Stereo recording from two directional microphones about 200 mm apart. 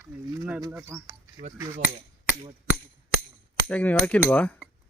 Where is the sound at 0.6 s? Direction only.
15° right (ahead or behind).